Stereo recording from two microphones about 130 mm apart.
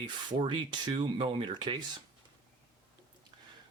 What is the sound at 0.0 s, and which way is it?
Speech, 35° right (ahead or behind).